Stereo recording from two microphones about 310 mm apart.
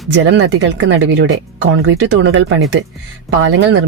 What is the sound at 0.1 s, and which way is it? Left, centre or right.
Speech, right.